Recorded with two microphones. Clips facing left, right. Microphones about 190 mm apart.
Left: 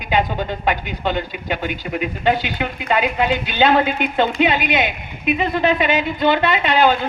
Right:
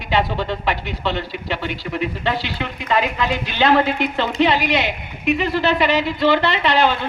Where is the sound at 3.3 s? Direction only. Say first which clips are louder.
Right 1 dB; 85° right.